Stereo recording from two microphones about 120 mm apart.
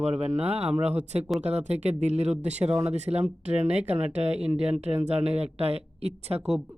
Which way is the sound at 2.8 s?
65° right (ahead or behind).